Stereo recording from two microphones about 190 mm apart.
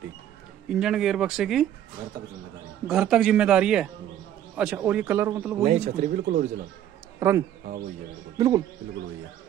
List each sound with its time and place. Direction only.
0.7 s speech: 5° right (ahead or behind)
2.9 s a man's voice: 5° right (ahead or behind)
5.7 s speech: 40° right (ahead or behind)
7.2 s a man's voice: 15° right (ahead or behind)